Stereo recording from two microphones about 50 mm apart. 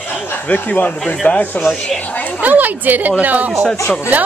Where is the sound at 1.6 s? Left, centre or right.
Centre.